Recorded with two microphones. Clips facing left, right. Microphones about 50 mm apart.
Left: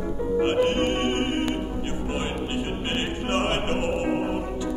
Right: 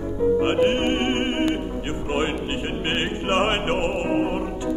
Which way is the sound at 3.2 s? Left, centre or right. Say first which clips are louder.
Right 4 dB; right.